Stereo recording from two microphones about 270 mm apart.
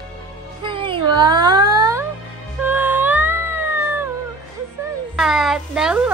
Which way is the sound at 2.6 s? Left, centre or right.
Centre.